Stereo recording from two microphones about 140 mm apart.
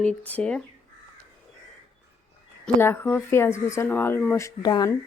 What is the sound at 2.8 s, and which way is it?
Speech, 15° left (ahead or behind).